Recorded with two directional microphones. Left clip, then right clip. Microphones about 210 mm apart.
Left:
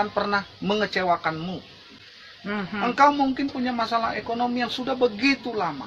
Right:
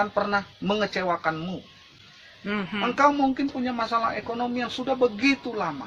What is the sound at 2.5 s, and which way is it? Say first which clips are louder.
Speech: even; 40° right (ahead or behind).